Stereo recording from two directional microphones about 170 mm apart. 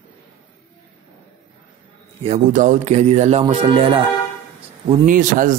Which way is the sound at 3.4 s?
30° right (ahead or behind).